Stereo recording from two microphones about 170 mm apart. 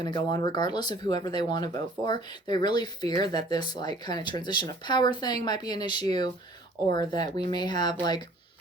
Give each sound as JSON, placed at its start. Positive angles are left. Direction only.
{"t": 0.0, "sound": "speech", "side_deg": 25}